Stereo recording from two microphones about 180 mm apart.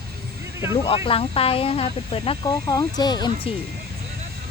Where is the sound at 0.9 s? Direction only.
30° left (ahead or behind).